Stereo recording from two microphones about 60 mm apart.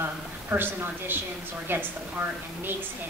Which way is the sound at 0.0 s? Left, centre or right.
Right.